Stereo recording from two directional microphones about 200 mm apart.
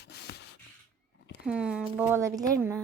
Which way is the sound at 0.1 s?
55° left (ahead or behind).